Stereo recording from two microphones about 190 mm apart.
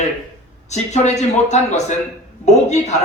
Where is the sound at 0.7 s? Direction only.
35° left (ahead or behind).